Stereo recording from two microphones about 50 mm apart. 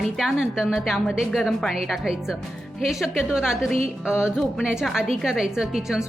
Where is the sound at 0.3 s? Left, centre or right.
Centre.